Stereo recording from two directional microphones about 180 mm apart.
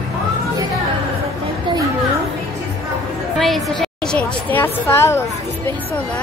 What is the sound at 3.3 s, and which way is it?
A woman's voice, centre (ahead or behind).